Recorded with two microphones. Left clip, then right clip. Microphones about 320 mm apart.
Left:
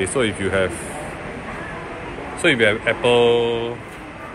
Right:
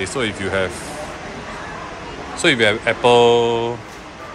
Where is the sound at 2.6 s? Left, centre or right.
Centre.